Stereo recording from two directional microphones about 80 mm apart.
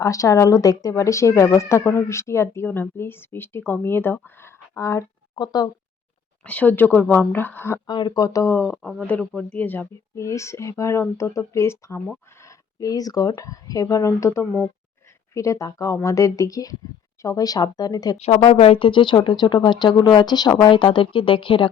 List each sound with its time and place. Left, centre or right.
0.0 s speech: left
2.6 s speech: left
5.3 s speech: left
6.4 s speech: centre
7.9 s speech: left
8.6 s speech: centre
10.2 s speech: left
12.4 s speech: left
18.8 s speech: left
19.1 s speech: left
20.6 s speech: left